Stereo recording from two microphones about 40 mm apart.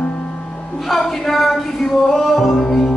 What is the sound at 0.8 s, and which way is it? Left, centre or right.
Music, centre.